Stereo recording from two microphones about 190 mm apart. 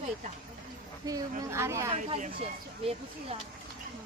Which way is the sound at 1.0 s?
20° right (ahead or behind).